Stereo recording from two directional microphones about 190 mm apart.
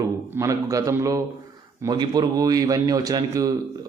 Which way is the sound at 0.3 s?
15° right (ahead or behind).